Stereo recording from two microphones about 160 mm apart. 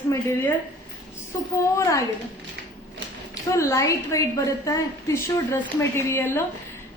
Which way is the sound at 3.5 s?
20° left (ahead or behind).